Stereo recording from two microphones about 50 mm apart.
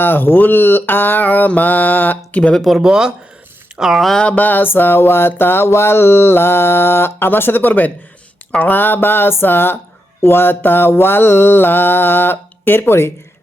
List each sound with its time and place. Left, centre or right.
0.0 s mantra: left
2.6 s speech: centre
4.4 s mantra: left